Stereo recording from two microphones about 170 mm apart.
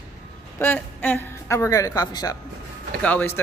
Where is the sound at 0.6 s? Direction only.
10° left (ahead or behind).